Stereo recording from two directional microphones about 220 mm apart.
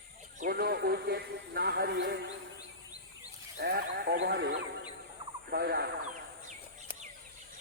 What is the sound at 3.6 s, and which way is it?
A man's voice, 45° right (ahead or behind).